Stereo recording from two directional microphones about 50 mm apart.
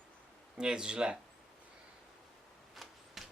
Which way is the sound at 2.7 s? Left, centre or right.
Centre.